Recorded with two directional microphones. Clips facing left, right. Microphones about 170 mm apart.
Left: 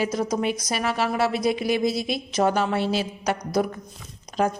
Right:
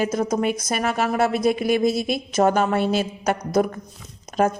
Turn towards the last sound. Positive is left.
turn(degrees=-50)  # may be behind; listen again after turning